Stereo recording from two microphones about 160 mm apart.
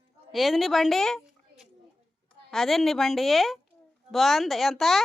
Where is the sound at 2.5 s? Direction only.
Centre (ahead or behind).